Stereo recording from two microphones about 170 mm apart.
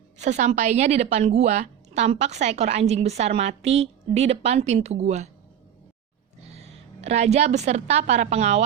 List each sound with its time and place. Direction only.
0.2 s a woman's voice: 40° right (ahead or behind)
6.5 s a woman's voice: 40° right (ahead or behind)